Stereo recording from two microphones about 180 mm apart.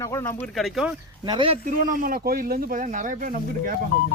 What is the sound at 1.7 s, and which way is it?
Speech, 50° right (ahead or behind).